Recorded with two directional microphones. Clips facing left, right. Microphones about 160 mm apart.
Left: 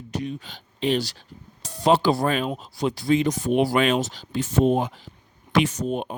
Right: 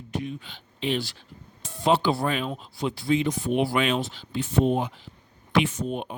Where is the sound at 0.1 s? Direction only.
35° left (ahead or behind).